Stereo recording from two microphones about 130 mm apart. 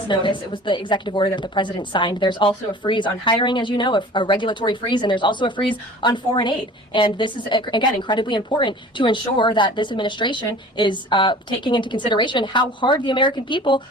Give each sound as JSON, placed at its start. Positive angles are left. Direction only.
{"t": 0.1, "sound": "a woman's voice", "side_deg": 35}